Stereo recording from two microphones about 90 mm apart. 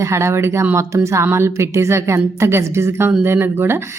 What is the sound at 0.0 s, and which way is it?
A woman's voice, 35° right (ahead or behind).